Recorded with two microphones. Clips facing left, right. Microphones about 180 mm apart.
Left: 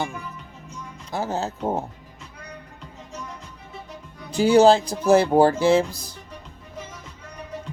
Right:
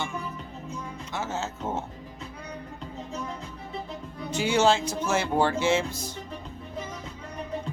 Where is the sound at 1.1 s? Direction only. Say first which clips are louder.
Left 6 dB; 35° left (ahead or behind).